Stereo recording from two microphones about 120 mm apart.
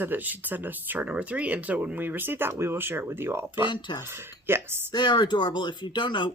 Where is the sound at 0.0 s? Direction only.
15° right (ahead or behind).